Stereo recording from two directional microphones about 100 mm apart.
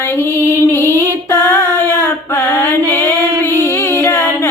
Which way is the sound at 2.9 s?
25° left (ahead or behind).